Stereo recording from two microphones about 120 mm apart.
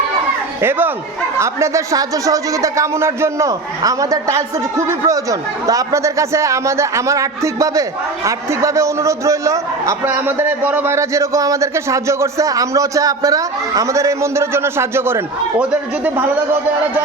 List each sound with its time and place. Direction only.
0.6 s a man's voice: 20° right (ahead or behind)